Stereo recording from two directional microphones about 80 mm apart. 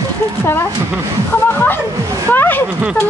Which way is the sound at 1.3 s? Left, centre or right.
Left.